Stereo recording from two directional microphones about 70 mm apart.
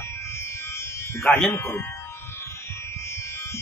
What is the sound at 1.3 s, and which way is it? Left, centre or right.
Speech, centre.